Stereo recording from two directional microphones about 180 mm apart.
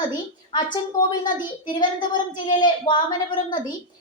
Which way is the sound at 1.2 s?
25° left (ahead or behind).